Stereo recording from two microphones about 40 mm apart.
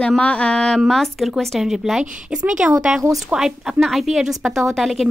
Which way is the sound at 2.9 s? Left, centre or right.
Centre.